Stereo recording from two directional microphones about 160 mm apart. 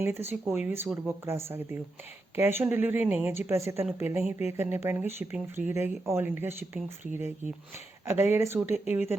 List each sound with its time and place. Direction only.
0.0 s speech: 15° right (ahead or behind)